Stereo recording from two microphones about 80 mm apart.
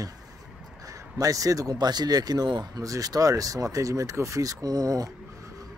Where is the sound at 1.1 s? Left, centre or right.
Right.